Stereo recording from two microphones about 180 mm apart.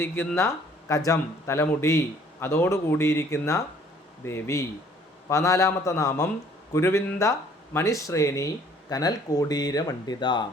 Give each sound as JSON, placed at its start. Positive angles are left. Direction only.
{"t": 0.0, "sound": "speech", "side_deg": 10}